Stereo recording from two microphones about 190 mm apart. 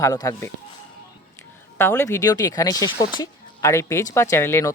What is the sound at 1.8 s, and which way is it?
Speech, 15° left (ahead or behind).